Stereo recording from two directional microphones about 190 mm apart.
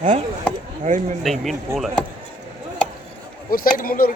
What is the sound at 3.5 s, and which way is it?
Speech, 50° left (ahead or behind).